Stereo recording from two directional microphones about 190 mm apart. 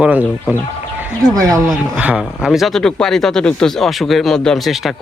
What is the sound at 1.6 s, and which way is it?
Speech, 5° right (ahead or behind).